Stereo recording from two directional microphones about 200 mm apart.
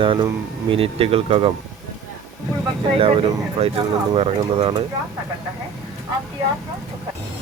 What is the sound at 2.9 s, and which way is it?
Speech, 30° right (ahead or behind).